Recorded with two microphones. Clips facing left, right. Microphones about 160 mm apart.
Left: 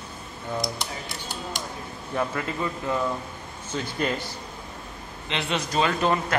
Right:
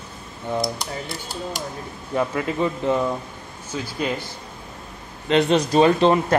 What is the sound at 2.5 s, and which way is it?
Speech, 20° right (ahead or behind).